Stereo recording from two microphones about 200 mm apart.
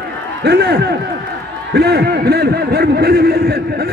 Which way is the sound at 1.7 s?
55° right (ahead or behind).